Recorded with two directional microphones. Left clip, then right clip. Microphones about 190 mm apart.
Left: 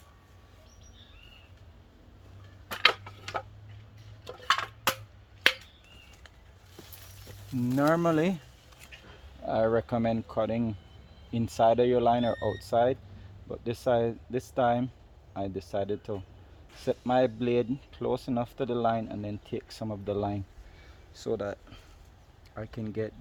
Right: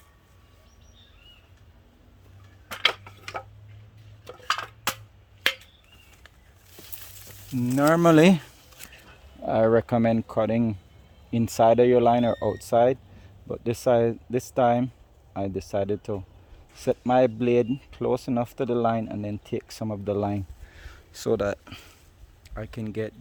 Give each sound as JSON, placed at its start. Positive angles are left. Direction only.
{"t": 2.6, "sound": "tick-tock", "side_deg": -10}
{"t": 4.3, "sound": "a sound", "side_deg": -10}
{"t": 5.5, "sound": "finger snapping", "side_deg": -5}
{"t": 7.5, "sound": "speech", "side_deg": -30}
{"t": 22.5, "sound": "speech", "side_deg": -45}